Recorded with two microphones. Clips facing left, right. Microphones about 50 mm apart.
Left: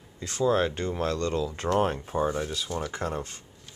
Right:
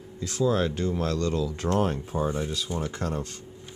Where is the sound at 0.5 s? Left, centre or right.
Centre.